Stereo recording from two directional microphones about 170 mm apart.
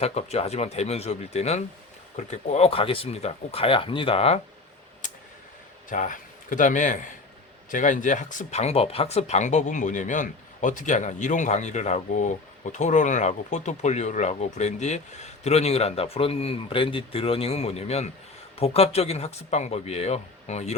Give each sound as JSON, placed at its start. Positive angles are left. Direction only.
{"t": 0.0, "sound": "speech", "side_deg": 40}
{"t": 5.0, "sound": "a sound", "side_deg": 50}
{"t": 5.9, "sound": "speech", "side_deg": 50}